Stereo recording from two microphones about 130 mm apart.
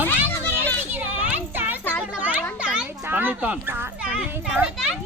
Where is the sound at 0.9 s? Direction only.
15° right (ahead or behind).